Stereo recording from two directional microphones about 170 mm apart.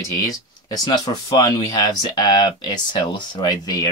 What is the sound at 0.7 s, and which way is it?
Speech, 25° left (ahead or behind).